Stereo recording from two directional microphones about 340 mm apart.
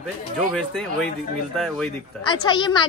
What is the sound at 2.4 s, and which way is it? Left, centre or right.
Speech, centre.